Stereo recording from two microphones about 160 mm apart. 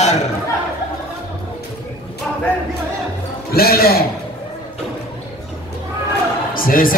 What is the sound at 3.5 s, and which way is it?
Speech, 70° left (ahead or behind).